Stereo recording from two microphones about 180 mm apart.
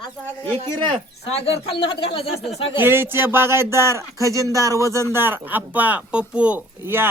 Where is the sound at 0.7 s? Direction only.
25° right (ahead or behind).